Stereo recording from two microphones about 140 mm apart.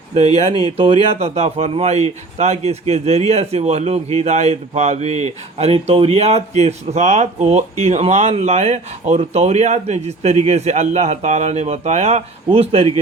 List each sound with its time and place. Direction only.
0.3 s speech: 45° right (ahead or behind)